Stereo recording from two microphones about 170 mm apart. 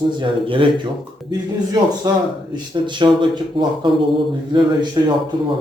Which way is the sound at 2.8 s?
25° right (ahead or behind).